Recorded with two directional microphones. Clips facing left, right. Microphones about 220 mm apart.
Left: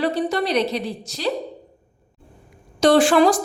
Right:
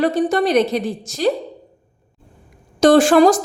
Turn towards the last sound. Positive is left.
turn(degrees=-45)  # may be behind; listen again after turning